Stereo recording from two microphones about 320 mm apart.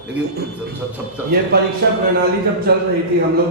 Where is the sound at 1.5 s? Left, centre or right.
Right.